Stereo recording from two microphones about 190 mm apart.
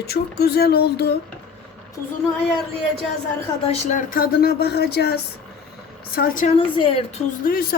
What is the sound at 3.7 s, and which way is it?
Speech, 40° left (ahead or behind).